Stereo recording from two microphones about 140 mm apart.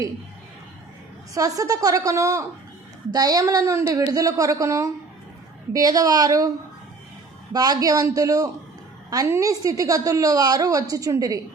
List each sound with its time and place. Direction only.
1.3 s a woman's voice: 25° right (ahead or behind)
7.5 s a woman's voice: 25° right (ahead or behind)